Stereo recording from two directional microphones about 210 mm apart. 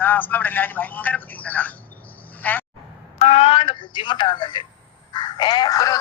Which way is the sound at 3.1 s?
30° left (ahead or behind).